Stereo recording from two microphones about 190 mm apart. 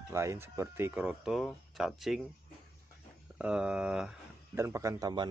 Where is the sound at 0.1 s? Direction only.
15° right (ahead or behind).